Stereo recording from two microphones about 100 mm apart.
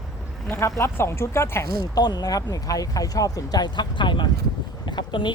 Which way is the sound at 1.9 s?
45° left (ahead or behind).